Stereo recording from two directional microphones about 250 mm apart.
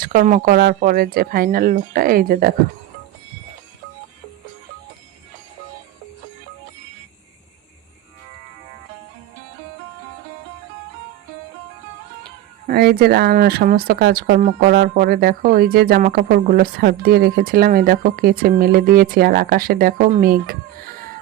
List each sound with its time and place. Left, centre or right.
0.0 s speech: right
12.6 s speech: right